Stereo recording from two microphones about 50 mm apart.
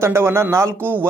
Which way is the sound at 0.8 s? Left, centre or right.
Right.